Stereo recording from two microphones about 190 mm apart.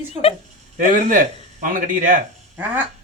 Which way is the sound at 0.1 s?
30° left (ahead or behind).